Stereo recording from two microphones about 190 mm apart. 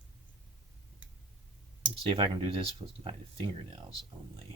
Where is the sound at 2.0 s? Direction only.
25° right (ahead or behind).